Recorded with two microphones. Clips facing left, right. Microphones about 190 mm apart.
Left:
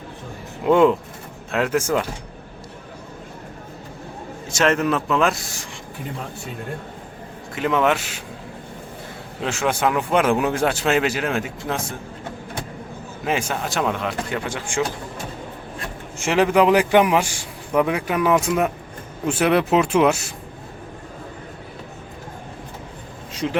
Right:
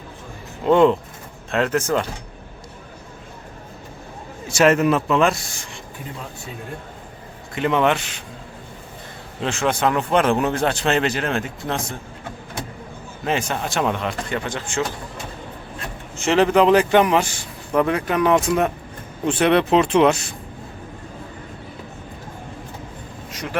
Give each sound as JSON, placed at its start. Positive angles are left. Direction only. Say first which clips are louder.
{"t": 0.6, "sound": "a man's voice", "louder": "even", "side_deg": 5}
{"t": 4.4, "sound": "speech", "louder": "right 3 dB", "side_deg": -10}
{"t": 7.5, "sound": "speech", "louder": "right 1 dB", "side_deg": 5}
{"t": 9.4, "sound": "a man's voice", "louder": "right 1 dB", "side_deg": 5}
{"t": 13.2, "sound": "speech", "louder": "even", "side_deg": 10}
{"t": 16.1, "sound": "a man's voice", "louder": "right 1 dB", "side_deg": 10}
{"t": 23.3, "sound": "a sound", "louder": "left 7 dB", "side_deg": 25}